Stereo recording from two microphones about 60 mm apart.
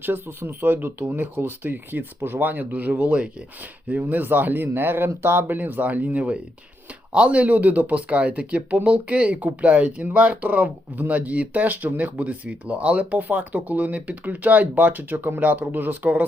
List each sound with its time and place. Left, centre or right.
0.0 s speech: right
5.5 s speech: right
15.1 s speech: right